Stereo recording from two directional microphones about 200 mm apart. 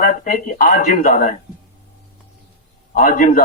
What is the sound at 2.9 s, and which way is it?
Speech, 40° left (ahead or behind).